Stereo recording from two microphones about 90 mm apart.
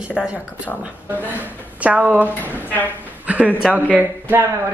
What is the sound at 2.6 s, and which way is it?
Speech, 20° left (ahead or behind).